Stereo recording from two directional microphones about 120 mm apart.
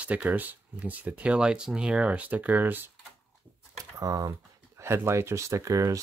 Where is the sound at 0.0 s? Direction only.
10° right (ahead or behind).